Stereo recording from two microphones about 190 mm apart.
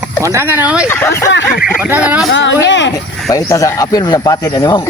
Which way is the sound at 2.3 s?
75° left (ahead or behind).